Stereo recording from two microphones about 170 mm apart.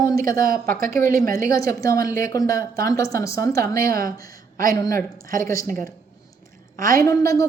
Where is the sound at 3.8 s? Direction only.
60° right (ahead or behind).